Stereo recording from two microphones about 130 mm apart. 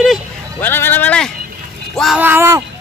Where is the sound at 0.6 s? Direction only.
15° left (ahead or behind).